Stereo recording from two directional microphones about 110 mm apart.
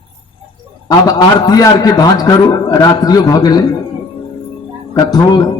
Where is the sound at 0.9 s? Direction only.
35° left (ahead or behind).